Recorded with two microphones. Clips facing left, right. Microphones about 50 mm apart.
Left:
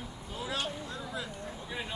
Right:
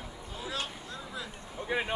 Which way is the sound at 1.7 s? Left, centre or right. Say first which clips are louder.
Right 9 dB; right.